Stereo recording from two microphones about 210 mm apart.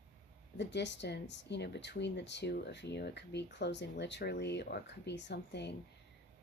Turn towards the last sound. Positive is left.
turn(degrees=55)  # may be behind; listen again after turning